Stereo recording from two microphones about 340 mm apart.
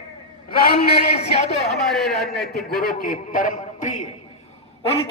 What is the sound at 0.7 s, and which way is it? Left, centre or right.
Speech, centre.